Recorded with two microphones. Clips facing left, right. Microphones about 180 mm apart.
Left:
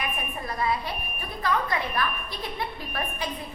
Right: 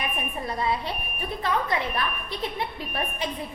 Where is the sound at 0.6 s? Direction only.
25° right (ahead or behind).